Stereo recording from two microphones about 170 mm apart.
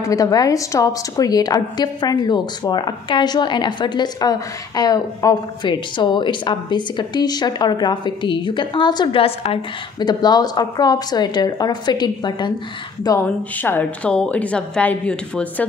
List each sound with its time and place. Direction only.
0.0 s a woman's voice: 20° left (ahead or behind)
13.6 s a woman's voice: 10° left (ahead or behind)